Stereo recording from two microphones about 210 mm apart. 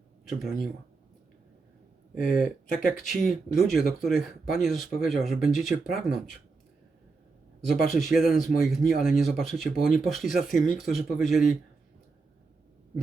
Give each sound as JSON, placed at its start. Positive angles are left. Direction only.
{"t": 0.3, "sound": "speech", "side_deg": 0}
{"t": 2.1, "sound": "speech", "side_deg": 40}
{"t": 2.8, "sound": "speech", "side_deg": 0}
{"t": 7.7, "sound": "speech", "side_deg": 0}